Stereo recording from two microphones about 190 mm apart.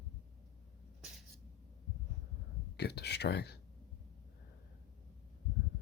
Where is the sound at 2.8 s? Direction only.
60° left (ahead or behind).